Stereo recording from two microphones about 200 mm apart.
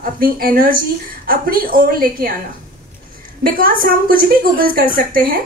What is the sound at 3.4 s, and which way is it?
Speech, 45° right (ahead or behind).